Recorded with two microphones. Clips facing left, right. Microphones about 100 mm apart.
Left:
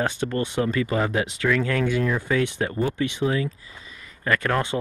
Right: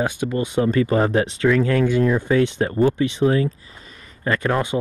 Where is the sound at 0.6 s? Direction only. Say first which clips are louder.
Right 6 dB; 35° right (ahead or behind).